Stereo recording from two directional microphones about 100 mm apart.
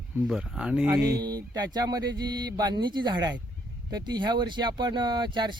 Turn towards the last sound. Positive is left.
turn(degrees=-50)  # may be behind; listen again after turning